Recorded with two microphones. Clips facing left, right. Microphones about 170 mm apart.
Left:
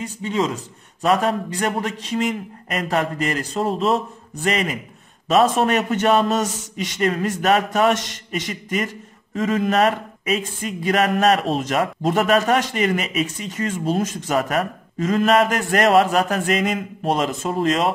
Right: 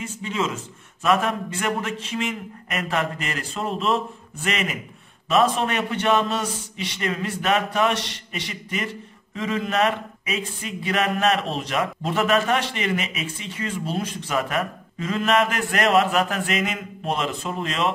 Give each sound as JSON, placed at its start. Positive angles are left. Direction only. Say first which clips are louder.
{"t": 0.0, "sound": "a man's voice", "louder": "left 4 dB", "side_deg": 35}